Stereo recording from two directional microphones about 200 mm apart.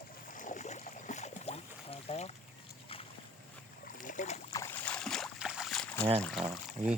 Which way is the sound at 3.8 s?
40° left (ahead or behind).